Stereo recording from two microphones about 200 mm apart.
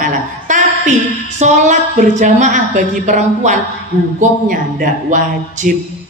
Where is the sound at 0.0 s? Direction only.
40° right (ahead or behind).